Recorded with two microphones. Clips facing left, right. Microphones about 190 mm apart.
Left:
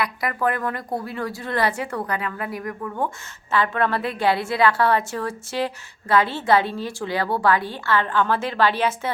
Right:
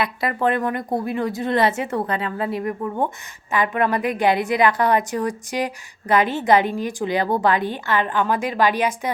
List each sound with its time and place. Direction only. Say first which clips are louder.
0.0 s a woman's voice: right 2 dB; 25° right (ahead or behind)